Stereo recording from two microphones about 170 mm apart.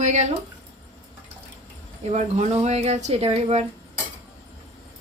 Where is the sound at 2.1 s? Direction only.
40° right (ahead or behind).